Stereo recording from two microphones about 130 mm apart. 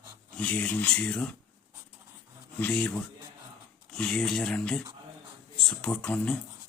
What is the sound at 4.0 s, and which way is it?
A man's voice, 5° left (ahead or behind).